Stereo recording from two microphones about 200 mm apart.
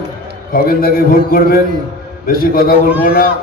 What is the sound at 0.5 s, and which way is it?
A man's voice, 45° left (ahead or behind).